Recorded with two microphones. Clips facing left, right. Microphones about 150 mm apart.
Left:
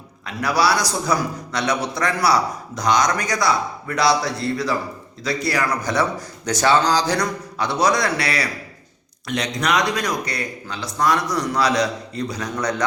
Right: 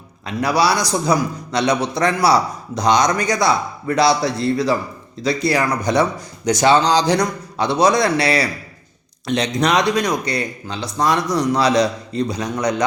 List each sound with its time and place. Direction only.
0.3 s a man's voice: 20° right (ahead or behind)